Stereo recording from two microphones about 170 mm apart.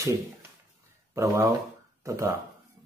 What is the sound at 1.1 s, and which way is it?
Speech, 15° right (ahead or behind).